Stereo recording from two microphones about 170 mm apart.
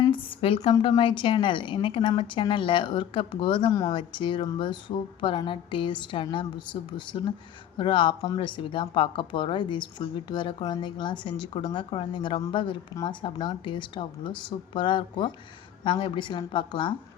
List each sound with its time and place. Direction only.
0.1 s a woman's voice: 30° left (ahead or behind)